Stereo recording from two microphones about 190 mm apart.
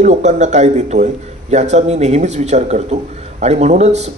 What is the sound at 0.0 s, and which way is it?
A man's voice, 40° right (ahead or behind).